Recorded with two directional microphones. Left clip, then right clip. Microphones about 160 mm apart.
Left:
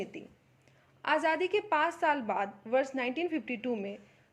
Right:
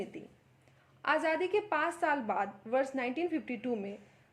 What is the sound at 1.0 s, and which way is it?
A woman's voice, 30° left (ahead or behind).